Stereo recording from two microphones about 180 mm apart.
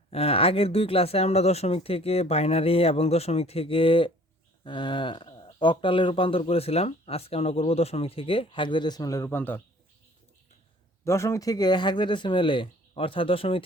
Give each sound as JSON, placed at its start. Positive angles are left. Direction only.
{"t": 0.1, "sound": "speech", "side_deg": 35}
{"t": 11.0, "sound": "speech", "side_deg": 15}